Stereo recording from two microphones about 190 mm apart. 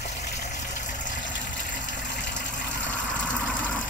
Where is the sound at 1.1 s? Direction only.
70° left (ahead or behind).